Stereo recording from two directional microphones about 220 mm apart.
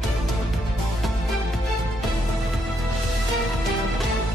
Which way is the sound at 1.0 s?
Centre (ahead or behind).